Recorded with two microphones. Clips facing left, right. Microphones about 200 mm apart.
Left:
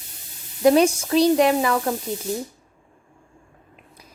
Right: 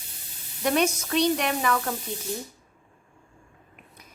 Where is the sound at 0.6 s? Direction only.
30° left (ahead or behind).